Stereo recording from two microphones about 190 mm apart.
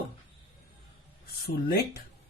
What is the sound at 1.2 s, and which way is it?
Speech, 50° left (ahead or behind).